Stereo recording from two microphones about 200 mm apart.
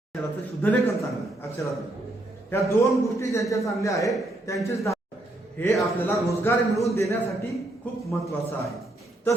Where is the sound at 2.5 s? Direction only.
15° left (ahead or behind).